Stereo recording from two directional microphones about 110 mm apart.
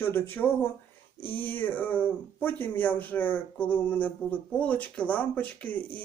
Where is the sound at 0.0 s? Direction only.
20° left (ahead or behind).